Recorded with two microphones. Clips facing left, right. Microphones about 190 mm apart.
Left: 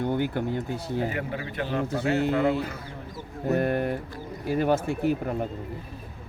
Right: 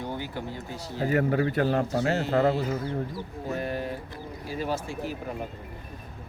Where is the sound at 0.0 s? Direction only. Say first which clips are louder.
Left 7 dB; 55° left (ahead or behind).